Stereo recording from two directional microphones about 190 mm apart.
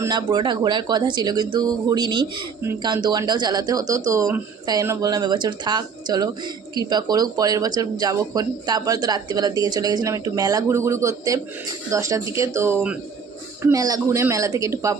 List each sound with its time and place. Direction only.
0.0 s speech: 20° right (ahead or behind)